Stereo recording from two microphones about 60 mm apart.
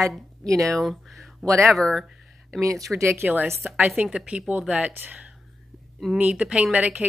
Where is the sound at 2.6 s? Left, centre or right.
Right.